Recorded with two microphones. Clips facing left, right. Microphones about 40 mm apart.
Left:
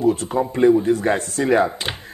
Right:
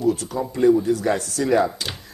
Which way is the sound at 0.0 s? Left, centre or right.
Left.